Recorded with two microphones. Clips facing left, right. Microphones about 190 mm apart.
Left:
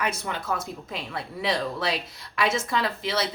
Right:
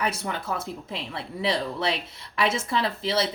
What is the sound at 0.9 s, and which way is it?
A woman's voice, 30° right (ahead or behind).